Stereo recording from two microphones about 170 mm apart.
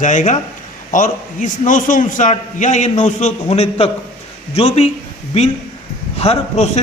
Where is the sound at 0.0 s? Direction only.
45° left (ahead or behind).